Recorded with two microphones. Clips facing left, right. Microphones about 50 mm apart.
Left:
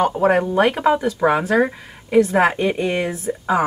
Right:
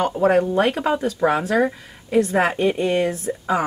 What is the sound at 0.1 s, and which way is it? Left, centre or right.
Speech, left.